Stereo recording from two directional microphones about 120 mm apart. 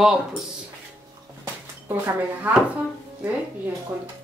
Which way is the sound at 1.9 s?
20° right (ahead or behind).